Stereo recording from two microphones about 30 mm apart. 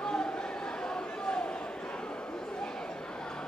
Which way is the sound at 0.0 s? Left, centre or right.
Left.